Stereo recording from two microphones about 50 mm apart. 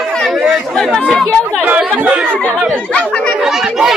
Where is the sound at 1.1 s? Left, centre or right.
Centre.